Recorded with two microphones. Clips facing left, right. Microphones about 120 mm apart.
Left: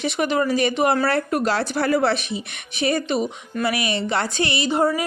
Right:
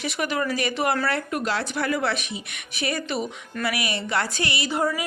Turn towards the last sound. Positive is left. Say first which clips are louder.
# left 5 dB
turn(degrees=30)  # may be behind; listen again after turning